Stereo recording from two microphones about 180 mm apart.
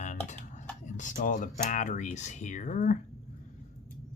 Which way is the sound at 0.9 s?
45° left (ahead or behind).